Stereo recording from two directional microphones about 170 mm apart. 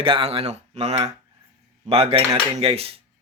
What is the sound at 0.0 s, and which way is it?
A man's voice, 30° right (ahead or behind).